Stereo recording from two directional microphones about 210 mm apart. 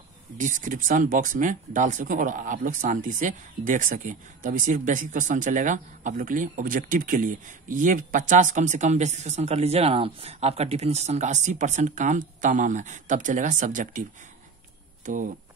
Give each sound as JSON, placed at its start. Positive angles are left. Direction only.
{"t": 0.4, "sound": "speech", "side_deg": -40}